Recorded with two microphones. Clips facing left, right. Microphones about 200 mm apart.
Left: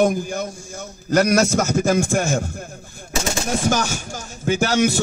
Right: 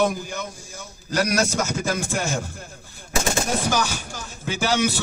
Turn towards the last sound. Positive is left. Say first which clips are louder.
# left 4 dB
turn(degrees=45)  # may be behind; listen again after turning